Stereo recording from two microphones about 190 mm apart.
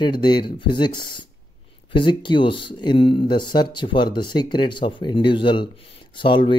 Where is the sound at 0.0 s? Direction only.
25° left (ahead or behind).